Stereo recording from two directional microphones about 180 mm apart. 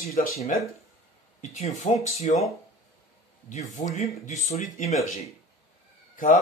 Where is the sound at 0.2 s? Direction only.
50° left (ahead or behind).